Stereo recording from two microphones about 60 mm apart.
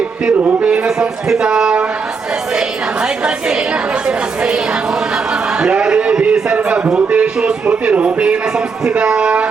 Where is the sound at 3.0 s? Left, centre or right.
Centre.